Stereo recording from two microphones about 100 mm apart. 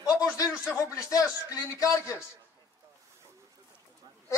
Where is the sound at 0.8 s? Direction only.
30° left (ahead or behind).